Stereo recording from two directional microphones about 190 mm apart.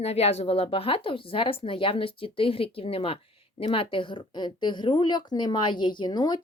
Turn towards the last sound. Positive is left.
turn(degrees=20)  # may be behind; listen again after turning